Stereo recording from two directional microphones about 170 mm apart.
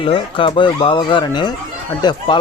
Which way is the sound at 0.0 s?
30° left (ahead or behind).